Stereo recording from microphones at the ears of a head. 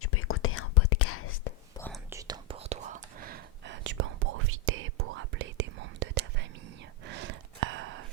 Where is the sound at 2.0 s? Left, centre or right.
Right.